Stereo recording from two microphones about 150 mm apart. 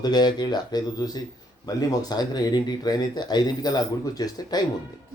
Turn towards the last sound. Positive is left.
turn(degrees=25)  # may be behind; listen again after turning